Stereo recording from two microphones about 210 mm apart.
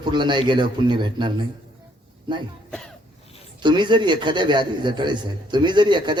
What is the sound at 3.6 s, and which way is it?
Speech, 20° right (ahead or behind).